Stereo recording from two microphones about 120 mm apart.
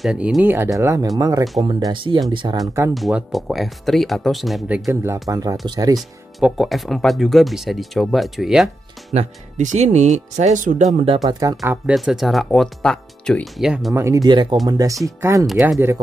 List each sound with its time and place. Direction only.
0.0 s speech: 5° right (ahead or behind)
0.7 s speech: 25° right (ahead or behind)
2.9 s speech: 5° right (ahead or behind)
4.8 s speech: 25° right (ahead or behind)
5.9 s speech: centre (ahead or behind)
9.1 s speech: 75° right (ahead or behind)
11.2 s speech: 30° right (ahead or behind)
11.8 s speech: 5° right (ahead or behind)
13.9 s speech: 25° right (ahead or behind)
14.2 s speech: 40° right (ahead or behind)